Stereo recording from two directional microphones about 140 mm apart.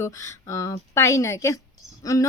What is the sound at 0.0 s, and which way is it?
Speech, 20° left (ahead or behind).